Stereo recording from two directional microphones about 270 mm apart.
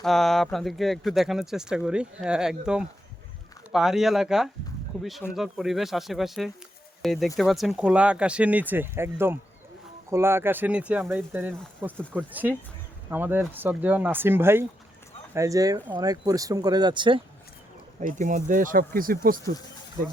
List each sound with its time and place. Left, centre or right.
0.0 s speech: centre
18.2 s speech: right